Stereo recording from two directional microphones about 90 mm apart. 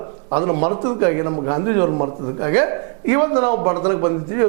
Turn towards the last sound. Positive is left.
turn(degrees=-20)  # may be behind; listen again after turning